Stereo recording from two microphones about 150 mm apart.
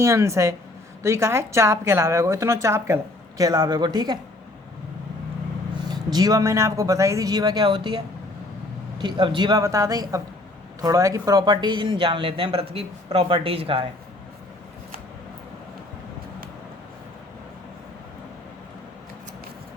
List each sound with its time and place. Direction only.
0.0 s a woman's voice: 20° right (ahead or behind)
5.8 s a woman's voice: 25° right (ahead or behind)